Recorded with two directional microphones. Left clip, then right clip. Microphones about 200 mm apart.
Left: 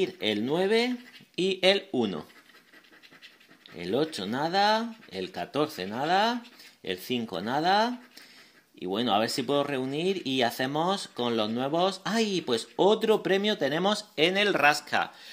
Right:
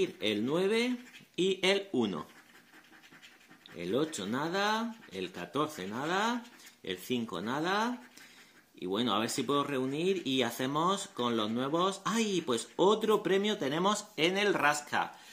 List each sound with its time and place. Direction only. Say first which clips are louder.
0.0 s speech: left 3 dB; 30° left (ahead or behind)
3.7 s speech: left 4 dB; 35° left (ahead or behind)